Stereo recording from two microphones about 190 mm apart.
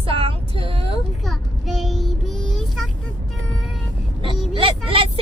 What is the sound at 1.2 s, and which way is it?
Child singing, centre (ahead or behind).